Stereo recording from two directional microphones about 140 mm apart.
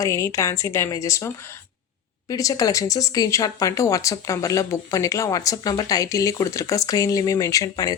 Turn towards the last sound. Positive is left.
turn(degrees=25)  # may be behind; listen again after turning